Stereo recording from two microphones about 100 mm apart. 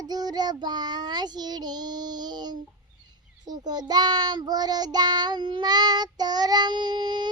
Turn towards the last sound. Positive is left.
turn(degrees=-45)  # may be behind; listen again after turning